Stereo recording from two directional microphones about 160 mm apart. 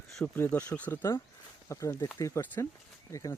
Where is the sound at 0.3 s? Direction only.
10° left (ahead or behind).